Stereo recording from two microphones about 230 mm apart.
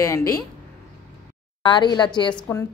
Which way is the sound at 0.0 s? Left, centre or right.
Centre.